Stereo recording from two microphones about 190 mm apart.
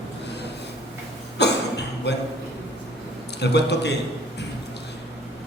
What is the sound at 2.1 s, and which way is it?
Speech, 60° left (ahead or behind).